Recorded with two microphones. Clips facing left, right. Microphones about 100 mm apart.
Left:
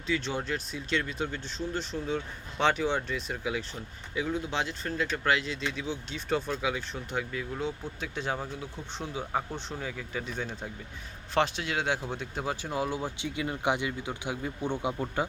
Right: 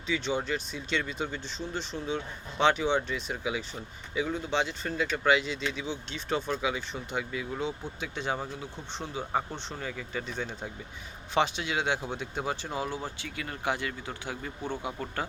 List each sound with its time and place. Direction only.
0.1 s speech: centre (ahead or behind)
12.9 s speech: 15° left (ahead or behind)